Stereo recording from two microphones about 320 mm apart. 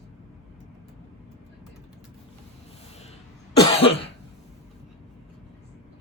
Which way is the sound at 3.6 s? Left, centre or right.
Centre.